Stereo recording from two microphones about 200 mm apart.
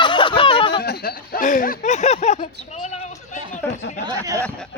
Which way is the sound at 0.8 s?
50° left (ahead or behind).